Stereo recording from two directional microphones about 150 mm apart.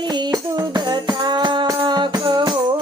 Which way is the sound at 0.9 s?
30° right (ahead or behind).